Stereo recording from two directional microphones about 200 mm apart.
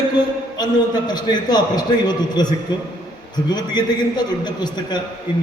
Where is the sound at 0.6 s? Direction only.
20° left (ahead or behind).